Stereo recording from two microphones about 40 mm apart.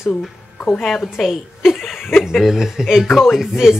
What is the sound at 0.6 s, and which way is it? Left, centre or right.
Speech, left.